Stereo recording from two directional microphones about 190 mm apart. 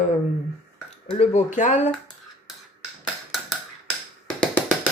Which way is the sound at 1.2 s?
35° left (ahead or behind).